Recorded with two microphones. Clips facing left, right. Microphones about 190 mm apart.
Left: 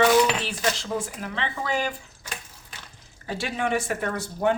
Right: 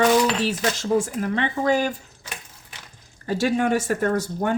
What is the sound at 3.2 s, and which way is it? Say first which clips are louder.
Speech: right 7 dB; 45° right (ahead or behind).